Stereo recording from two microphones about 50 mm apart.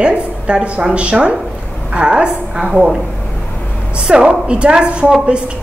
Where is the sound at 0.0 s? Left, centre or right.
Right.